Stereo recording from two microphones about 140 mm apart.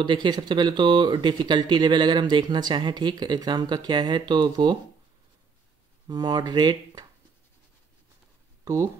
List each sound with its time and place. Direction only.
0.0 s speech: 35° right (ahead or behind)
6.0 s speech: 30° right (ahead or behind)
8.6 s speech: 25° right (ahead or behind)